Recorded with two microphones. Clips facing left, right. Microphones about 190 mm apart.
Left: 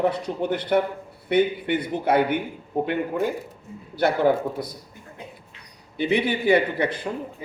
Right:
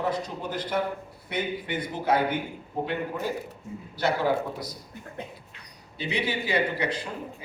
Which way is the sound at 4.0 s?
55° left (ahead or behind).